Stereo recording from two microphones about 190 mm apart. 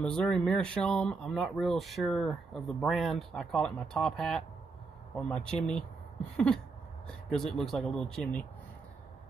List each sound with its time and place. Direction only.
0.0 s speech: 5° left (ahead or behind)